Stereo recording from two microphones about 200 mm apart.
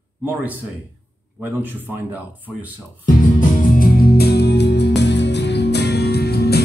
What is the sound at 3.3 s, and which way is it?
Music, 45° left (ahead or behind).